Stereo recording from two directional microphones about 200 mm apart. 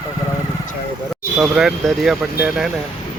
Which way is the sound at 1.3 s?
Centre (ahead or behind).